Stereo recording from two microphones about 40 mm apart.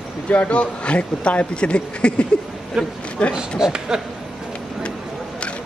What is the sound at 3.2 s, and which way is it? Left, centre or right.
Speech, left.